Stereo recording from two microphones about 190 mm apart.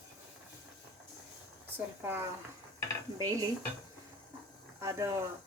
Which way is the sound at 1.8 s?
10° right (ahead or behind).